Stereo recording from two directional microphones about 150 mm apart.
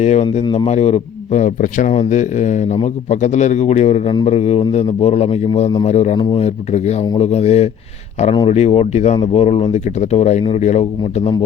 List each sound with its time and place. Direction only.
0.0 s a man's voice: 50° left (ahead or behind)